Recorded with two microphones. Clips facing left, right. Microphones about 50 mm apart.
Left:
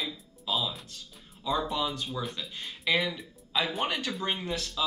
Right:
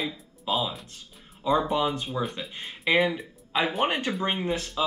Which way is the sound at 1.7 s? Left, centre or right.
Right.